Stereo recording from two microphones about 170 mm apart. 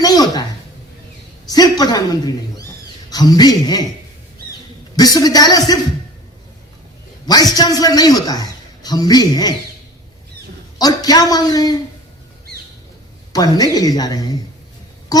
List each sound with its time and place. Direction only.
0.0 s a sound: 20° left (ahead or behind)
1.5 s a man's voice: 25° left (ahead or behind)
4.9 s a man's voice: 20° left (ahead or behind)
7.3 s a man's voice: 25° left (ahead or behind)
10.8 s a man's voice: 20° left (ahead or behind)
13.3 s a man's voice: 25° left (ahead or behind)
15.1 s a sound: 20° left (ahead or behind)